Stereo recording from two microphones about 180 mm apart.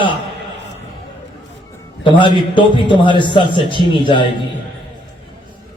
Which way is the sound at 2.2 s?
25° left (ahead or behind).